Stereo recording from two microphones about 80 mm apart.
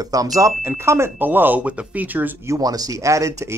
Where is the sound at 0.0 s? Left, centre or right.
Right.